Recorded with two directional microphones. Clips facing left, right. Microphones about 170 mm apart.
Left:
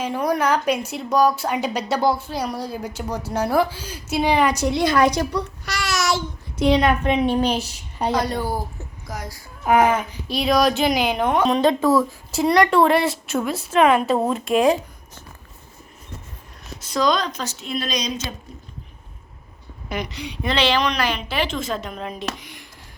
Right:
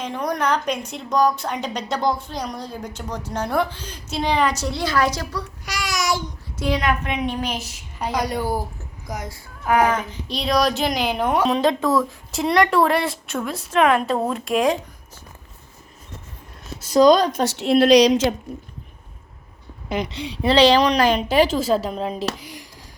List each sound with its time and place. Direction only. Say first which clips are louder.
0.0 s speech: left 3 dB; 5° left (ahead or behind)
5.6 s child singing: right 1 dB; 15° right (ahead or behind)
6.6 s a woman's voice: left 5 dB; 25° left (ahead or behind)
8.1 s speech: right 1 dB; 10° right (ahead or behind)
9.6 s speech: left 2 dB; 20° left (ahead or behind)
10.2 s speech: left 2 dB; 5° left (ahead or behind)
16.9 s a woman's voice: right 7 dB; 40° right (ahead or behind)
17.6 s speech: right 15 dB; 75° right (ahead or behind)
19.9 s a woman's voice: right 3 dB; 25° right (ahead or behind)